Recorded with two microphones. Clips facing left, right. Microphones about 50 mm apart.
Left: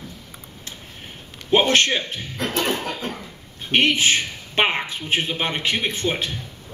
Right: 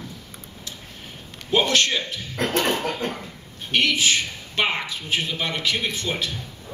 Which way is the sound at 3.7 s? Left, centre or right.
Left.